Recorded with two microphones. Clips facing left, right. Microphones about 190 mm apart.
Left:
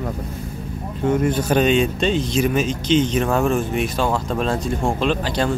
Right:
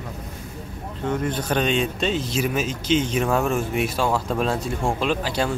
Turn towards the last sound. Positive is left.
turn(degrees=-5)  # may be behind; listen again after turning